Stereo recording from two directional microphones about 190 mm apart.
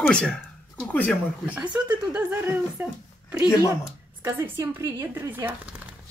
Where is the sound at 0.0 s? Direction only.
5° left (ahead or behind).